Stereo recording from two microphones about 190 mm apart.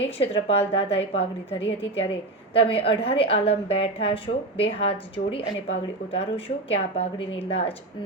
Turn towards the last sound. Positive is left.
turn(degrees=30)  # may be behind; listen again after turning